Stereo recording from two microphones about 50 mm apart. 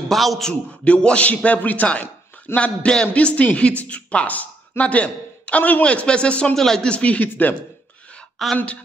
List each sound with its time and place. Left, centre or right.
0.1 s a man's voice: centre
0.5 s a woman's voice: left
6.5 s speech: centre
6.8 s a woman's voice: left
8.4 s a man's voice: centre